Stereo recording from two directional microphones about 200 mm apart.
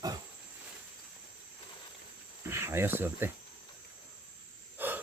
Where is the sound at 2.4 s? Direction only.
10° right (ahead or behind).